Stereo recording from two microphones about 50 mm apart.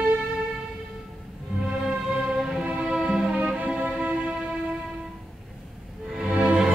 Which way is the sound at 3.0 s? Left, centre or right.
Centre.